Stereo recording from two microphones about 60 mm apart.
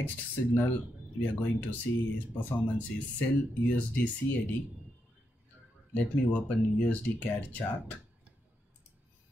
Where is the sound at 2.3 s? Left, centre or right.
Left.